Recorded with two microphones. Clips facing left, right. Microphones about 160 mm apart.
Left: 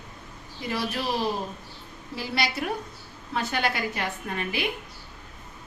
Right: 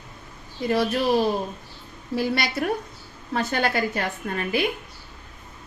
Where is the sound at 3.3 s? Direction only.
45° right (ahead or behind).